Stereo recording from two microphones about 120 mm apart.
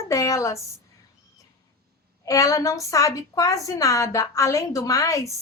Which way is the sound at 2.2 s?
30° left (ahead or behind).